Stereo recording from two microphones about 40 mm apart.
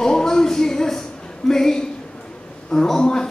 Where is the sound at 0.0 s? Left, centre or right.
Centre.